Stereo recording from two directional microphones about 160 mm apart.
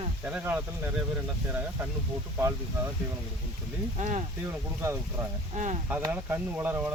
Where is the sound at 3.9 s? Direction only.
45° right (ahead or behind).